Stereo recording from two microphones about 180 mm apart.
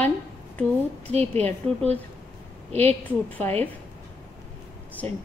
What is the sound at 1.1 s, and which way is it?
Speech, 35° right (ahead or behind).